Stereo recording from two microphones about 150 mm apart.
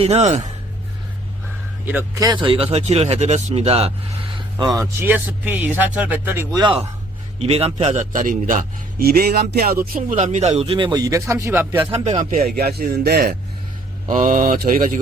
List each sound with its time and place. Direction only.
0.0 s speech: 45° right (ahead or behind)
2.1 s speech: 25° right (ahead or behind); by 3.9 s 40° right (ahead or behind)
4.4 s speech: 25° right (ahead or behind); by 6.4 s 10° right (ahead or behind)
6.5 s a man's voice: 30° right (ahead or behind)
7.3 s a man's voice: 40° right (ahead or behind); by 10.2 s 75° right (ahead or behind)
10.2 s a man's voice: 50° right (ahead or behind); by 11.6 s 20° right (ahead or behind)
11.8 s speech: 45° right (ahead or behind)
12.5 s a man's voice: 90° right
14.1 s speech: 60° right (ahead or behind)